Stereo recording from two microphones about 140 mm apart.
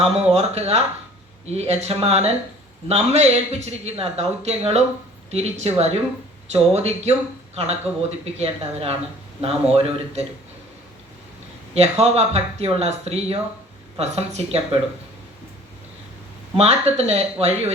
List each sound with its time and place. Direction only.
0.0 s a man's voice: 50° right (ahead or behind)
11.7 s a man's voice: 50° right (ahead or behind)
16.6 s a man's voice: 50° right (ahead or behind)